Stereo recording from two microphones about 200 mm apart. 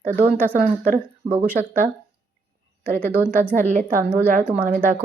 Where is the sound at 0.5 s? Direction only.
45° right (ahead or behind).